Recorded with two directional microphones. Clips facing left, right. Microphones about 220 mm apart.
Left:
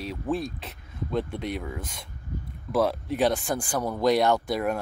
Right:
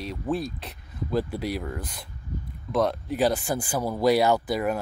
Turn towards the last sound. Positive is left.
turn(degrees=0)  # may be behind; listen again after turning